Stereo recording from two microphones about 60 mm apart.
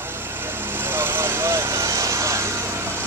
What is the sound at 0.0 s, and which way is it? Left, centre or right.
Vehicle, right.